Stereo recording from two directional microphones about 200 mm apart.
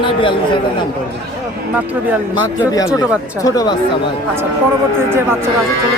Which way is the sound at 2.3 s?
20° left (ahead or behind).